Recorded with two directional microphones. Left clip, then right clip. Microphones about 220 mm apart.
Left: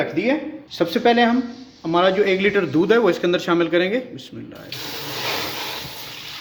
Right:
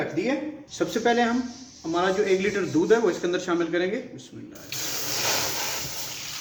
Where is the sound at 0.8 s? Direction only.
45° left (ahead or behind).